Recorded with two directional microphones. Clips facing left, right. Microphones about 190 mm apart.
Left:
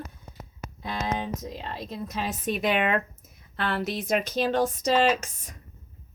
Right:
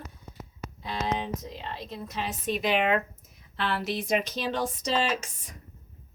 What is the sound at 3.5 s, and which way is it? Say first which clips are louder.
Speech: left 1 dB; 50° left (ahead or behind).